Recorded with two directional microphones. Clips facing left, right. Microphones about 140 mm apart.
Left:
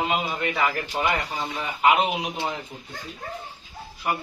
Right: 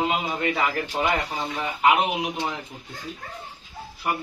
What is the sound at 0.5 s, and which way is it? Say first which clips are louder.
Speech: even; 25° right (ahead or behind).